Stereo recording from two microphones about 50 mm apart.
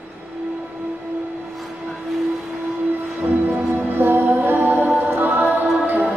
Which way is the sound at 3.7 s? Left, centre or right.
Right.